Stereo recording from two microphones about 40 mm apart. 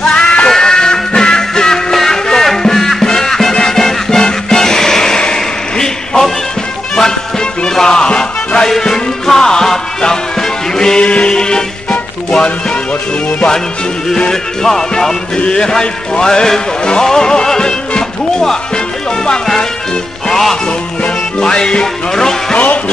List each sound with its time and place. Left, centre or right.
0.0 s music: centre
5.2 s a sound: centre
7.0 s music: centre
8.6 s music: centre
14.3 s music: centre
20.2 s music: centre
21.4 s music: left